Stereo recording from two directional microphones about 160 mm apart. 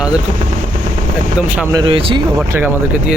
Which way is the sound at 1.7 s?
30° right (ahead or behind).